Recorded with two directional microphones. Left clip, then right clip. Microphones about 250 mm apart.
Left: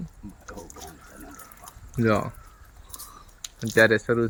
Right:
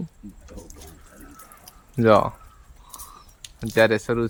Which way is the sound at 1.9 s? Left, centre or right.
Centre.